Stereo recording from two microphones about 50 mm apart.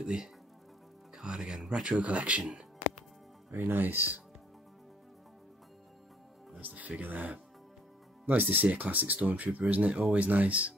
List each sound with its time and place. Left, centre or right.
0.0 s speech: centre
3.5 s speech: right
6.6 s speech: right